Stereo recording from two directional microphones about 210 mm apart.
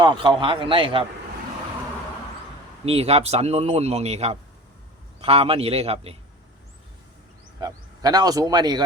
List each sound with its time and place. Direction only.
0.0 s speech: 20° right (ahead or behind)
2.8 s speech: 30° right (ahead or behind)
7.6 s speech: 20° right (ahead or behind)